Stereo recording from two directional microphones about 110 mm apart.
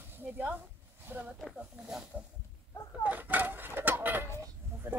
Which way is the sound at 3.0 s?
15° right (ahead or behind).